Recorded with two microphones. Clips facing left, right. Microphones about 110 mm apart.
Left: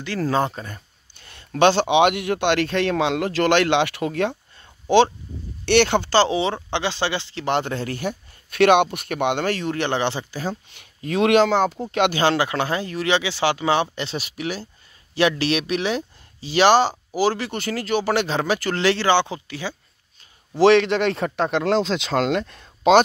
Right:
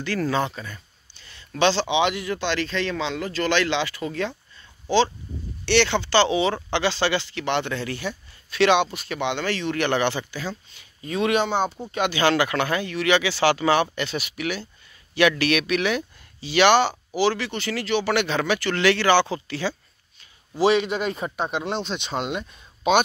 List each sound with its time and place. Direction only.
0.2 s speech: 40° left (ahead or behind); by 7.4 s 25° left (ahead or behind)
7.4 s speech: 40° left (ahead or behind)
9.8 s speech: 25° left (ahead or behind)
10.7 s speech: 65° left (ahead or behind); by 11.8 s 90° left
12.2 s speech: 25° left (ahead or behind)
19.0 s speech: 20° left (ahead or behind)
20.5 s speech: 75° left (ahead or behind); by 22.9 s 90° left